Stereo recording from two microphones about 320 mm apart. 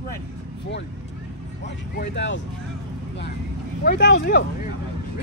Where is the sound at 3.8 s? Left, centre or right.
Left.